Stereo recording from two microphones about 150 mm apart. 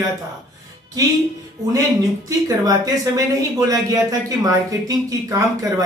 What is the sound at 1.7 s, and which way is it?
Speech, 20° right (ahead or behind).